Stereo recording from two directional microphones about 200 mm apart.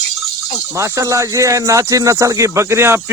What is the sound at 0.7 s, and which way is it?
Speech, 15° right (ahead or behind).